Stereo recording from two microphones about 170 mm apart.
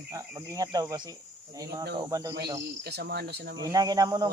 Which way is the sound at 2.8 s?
70° right (ahead or behind).